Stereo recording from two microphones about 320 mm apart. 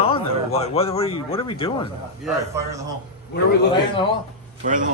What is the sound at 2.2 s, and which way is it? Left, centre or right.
Speech, centre.